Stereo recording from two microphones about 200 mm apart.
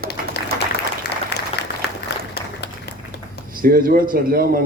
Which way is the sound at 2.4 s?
55° left (ahead or behind).